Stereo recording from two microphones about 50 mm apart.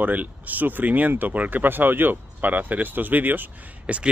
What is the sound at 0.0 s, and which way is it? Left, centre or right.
Speech, right.